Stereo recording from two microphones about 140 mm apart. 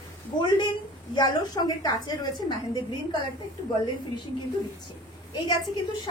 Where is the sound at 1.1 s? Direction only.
30° left (ahead or behind).